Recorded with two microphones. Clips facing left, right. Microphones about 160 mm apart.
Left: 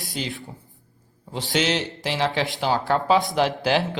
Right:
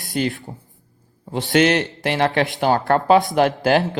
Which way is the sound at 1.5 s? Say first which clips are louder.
Right 7 dB; 55° right (ahead or behind).